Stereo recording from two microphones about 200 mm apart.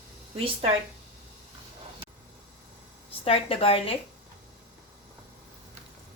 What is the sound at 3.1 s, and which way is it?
Speech, 30° left (ahead or behind).